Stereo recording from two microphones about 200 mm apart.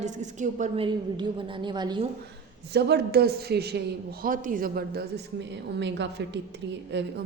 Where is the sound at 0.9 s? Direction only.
25° right (ahead or behind).